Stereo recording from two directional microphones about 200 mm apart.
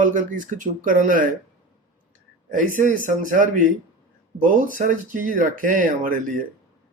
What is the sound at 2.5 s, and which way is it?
Speech, 40° right (ahead or behind).